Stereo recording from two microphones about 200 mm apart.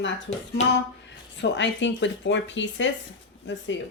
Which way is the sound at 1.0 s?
60° left (ahead or behind).